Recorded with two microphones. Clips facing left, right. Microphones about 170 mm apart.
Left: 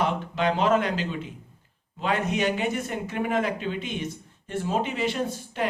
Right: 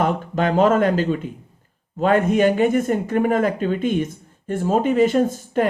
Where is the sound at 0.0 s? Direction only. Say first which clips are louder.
Right 5 dB; 45° right (ahead or behind).